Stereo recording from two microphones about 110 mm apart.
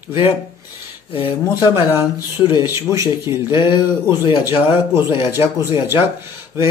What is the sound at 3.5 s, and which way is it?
Speech, 45° left (ahead or behind).